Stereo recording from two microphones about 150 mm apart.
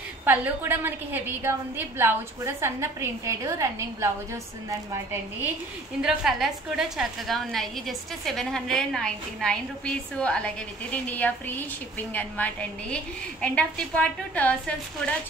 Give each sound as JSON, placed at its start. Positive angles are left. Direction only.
{"t": 0.2, "sound": "a woman's voice", "side_deg": -15}
{"t": 6.0, "sound": "a woman's voice", "side_deg": 0}